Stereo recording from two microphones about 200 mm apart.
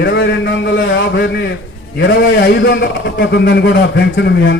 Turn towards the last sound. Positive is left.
turn(degrees=60)  # may be behind; listen again after turning